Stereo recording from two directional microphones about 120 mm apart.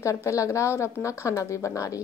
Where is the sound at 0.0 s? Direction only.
25° left (ahead or behind).